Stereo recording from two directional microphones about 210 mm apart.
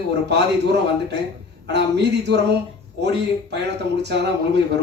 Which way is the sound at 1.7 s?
55° right (ahead or behind).